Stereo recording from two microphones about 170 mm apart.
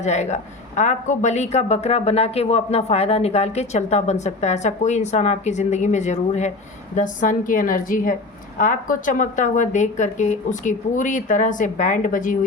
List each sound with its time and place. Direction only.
0.0 s a woman's voice: 40° left (ahead or behind)